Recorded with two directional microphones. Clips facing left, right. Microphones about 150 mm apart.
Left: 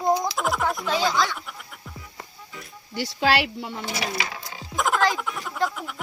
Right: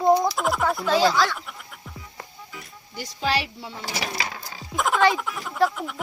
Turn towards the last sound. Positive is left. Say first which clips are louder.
# right 4 dB
turn(degrees=0)  # may be behind; listen again after turning